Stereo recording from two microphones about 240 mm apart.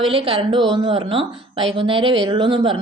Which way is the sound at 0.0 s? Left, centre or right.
Right.